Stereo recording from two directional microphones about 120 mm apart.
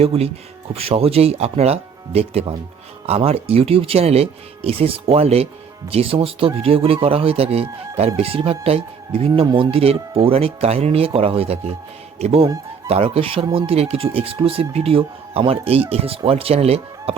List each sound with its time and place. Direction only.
0.0 s speech: 55° right (ahead or behind)
9.5 s speech: 35° right (ahead or behind)
9.7 s speech: 55° right (ahead or behind)